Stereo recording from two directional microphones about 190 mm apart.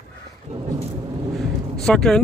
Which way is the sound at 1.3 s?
Centre (ahead or behind).